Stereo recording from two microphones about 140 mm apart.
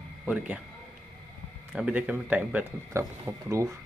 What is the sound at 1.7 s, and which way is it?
Speech, 5° right (ahead or behind).